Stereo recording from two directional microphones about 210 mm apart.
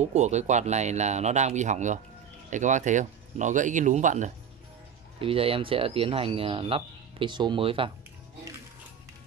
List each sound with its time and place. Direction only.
0.1 s speech: 35° right (ahead or behind)